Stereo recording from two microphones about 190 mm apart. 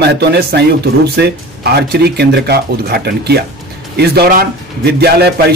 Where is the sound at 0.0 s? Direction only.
60° right (ahead or behind).